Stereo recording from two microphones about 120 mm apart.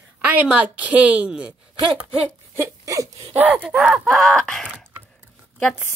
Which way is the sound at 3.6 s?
Centre (ahead or behind).